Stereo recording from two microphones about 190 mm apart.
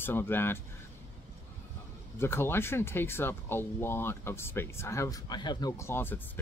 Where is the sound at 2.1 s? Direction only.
10° left (ahead or behind).